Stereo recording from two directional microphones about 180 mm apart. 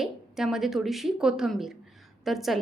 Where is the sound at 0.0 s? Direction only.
Centre (ahead or behind).